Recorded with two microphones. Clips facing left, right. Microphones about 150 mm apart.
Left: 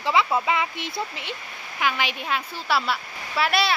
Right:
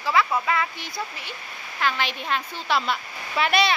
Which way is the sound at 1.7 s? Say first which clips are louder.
Even; 10° left (ahead or behind).